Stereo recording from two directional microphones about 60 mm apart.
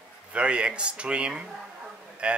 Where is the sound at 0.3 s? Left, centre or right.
Centre.